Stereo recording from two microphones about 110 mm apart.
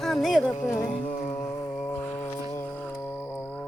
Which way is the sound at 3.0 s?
15° left (ahead or behind).